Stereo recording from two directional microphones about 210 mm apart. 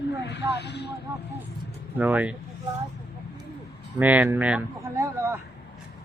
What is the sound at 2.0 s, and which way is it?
Speech, 5° right (ahead or behind).